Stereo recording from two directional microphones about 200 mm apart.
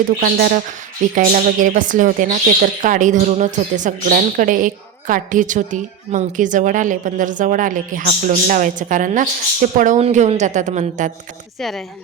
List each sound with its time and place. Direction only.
0.2 s a woman's voice: 45° right (ahead or behind)